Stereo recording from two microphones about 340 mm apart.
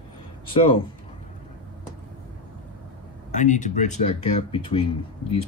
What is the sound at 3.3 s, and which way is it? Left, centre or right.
Speech, left.